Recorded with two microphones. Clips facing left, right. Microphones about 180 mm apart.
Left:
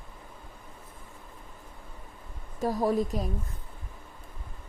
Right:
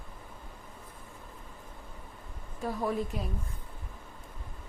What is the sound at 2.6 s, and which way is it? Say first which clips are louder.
Speech: left 5 dB; 35° left (ahead or behind).